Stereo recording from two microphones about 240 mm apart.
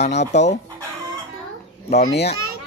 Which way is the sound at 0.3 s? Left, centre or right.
Left.